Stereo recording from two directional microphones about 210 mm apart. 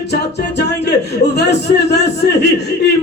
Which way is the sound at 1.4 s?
55° left (ahead or behind).